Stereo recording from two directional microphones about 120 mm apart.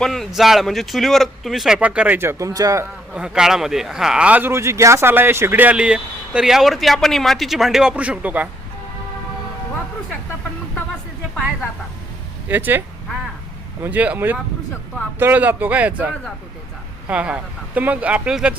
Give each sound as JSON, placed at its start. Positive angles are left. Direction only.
{"t": 0.0, "sound": "speech", "side_deg": 0}
{"t": 2.5, "sound": "a man's voice", "side_deg": -30}
{"t": 3.1, "sound": "speech", "side_deg": -5}
{"t": 12.5, "sound": "speech", "side_deg": -15}
{"t": 13.8, "sound": "speech", "side_deg": -15}